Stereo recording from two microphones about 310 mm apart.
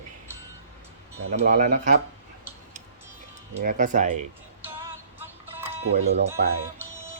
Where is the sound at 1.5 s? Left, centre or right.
Right.